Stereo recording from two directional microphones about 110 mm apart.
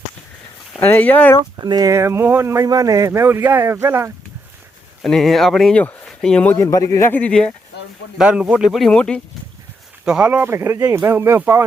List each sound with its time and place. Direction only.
0.8 s speech: 15° left (ahead or behind)
1.5 s speech: 40° right (ahead or behind)
5.0 s speech: centre (ahead or behind)
6.6 s a man's voice: 30° left (ahead or behind)
7.1 s speech: 10° left (ahead or behind)
8.2 s speech: 10° right (ahead or behind); by 9.2 s 10° left (ahead or behind)
10.1 s speech: 10° right (ahead or behind)